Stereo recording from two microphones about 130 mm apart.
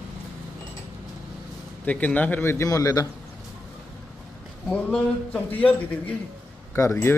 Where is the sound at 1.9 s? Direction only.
10° left (ahead or behind).